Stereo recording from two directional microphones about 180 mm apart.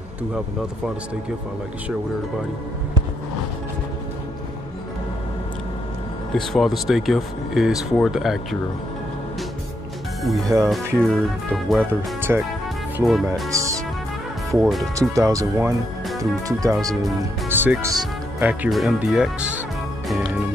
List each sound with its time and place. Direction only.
6.3 s speech: centre (ahead or behind)
10.2 s speech: centre (ahead or behind)
11.8 s speech: 10° right (ahead or behind)
12.9 s speech: centre (ahead or behind)
13.5 s speech: 15° right (ahead or behind)
14.6 s speech: centre (ahead or behind)
15.0 s speech: 20° right (ahead or behind)
20.1 s music: centre (ahead or behind)